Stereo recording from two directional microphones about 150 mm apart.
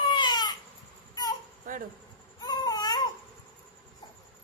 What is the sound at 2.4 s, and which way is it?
Cat, 25° left (ahead or behind).